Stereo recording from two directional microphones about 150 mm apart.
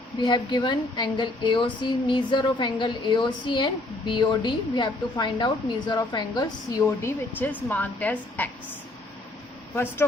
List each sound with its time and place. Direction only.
0.2 s a woman's voice: 30° left (ahead or behind)
6.8 s a woman's voice: 15° left (ahead or behind)
9.7 s a woman's voice: 15° left (ahead or behind)